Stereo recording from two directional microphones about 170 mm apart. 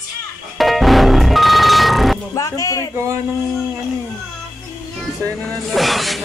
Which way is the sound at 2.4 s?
20° left (ahead or behind).